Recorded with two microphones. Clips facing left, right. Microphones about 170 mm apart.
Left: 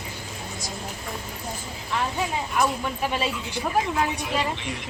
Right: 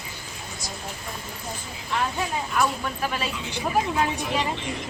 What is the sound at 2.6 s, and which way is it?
Speech, 20° left (ahead or behind).